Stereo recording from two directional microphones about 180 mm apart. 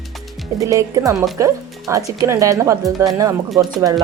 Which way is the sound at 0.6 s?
20° right (ahead or behind).